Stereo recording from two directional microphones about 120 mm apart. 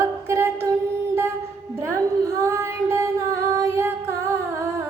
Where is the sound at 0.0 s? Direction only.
20° right (ahead or behind).